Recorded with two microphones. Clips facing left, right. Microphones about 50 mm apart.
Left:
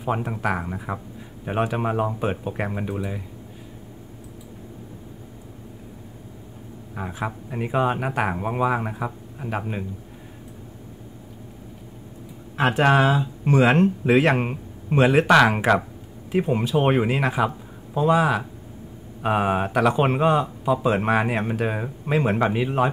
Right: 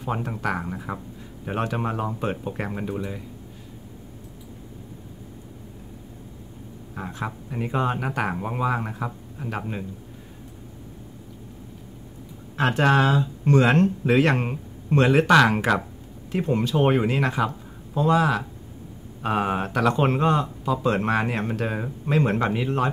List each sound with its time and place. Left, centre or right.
0.0 s speech: centre
7.0 s speech: centre
12.5 s speech: centre